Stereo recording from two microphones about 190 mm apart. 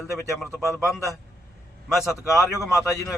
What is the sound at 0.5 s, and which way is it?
Speech, 15° left (ahead or behind).